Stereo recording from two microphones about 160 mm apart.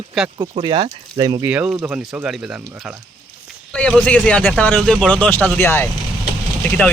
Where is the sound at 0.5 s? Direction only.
30° right (ahead or behind).